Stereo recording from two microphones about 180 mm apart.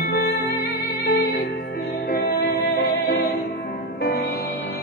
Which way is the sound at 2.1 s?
60° left (ahead or behind).